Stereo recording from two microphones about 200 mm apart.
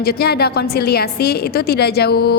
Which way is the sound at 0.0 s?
50° left (ahead or behind).